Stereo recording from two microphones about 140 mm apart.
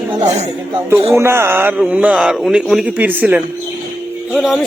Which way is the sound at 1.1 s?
20° right (ahead or behind).